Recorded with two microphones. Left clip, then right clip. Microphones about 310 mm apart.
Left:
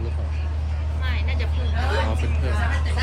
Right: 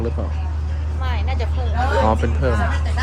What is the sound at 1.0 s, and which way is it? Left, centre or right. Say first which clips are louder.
Vehicle: right 4 dB; centre.